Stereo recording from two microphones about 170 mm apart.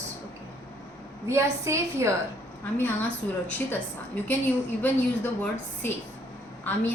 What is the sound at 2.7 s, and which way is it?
A woman's voice, 10° left (ahead or behind).